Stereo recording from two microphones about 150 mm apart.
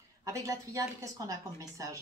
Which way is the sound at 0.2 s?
20° right (ahead or behind).